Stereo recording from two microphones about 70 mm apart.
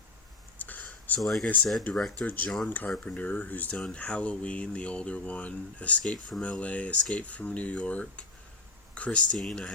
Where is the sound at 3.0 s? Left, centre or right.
Left.